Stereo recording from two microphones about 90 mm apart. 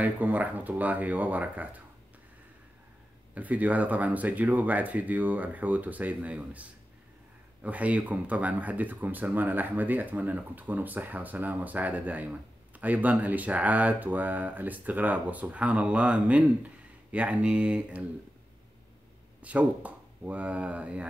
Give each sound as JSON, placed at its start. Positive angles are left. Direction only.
{"t": 0.0, "sound": "speech", "side_deg": -20}
{"t": 3.3, "sound": "speech", "side_deg": -15}
{"t": 19.4, "sound": "speech", "side_deg": -15}